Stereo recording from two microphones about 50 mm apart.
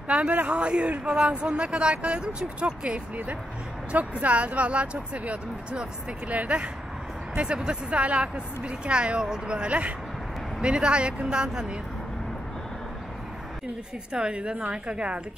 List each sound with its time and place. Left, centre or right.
0.1 s speech: right
14.1 s speech: centre